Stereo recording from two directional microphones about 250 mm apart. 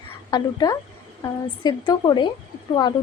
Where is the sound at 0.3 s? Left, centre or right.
Centre.